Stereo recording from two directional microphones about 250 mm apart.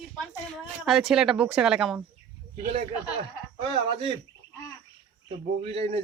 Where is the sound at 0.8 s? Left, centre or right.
Centre.